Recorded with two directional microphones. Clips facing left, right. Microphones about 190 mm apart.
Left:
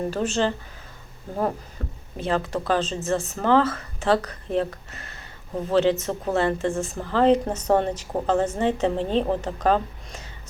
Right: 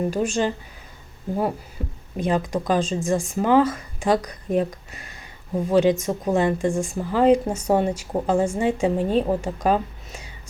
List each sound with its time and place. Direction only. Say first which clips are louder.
0.1 s speech: right 1 dB; 15° right (ahead or behind)
1.8 s speech: right 5 dB; 10° right (ahead or behind)